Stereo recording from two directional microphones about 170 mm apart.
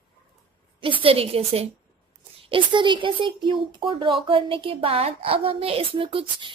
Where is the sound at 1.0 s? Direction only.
35° right (ahead or behind).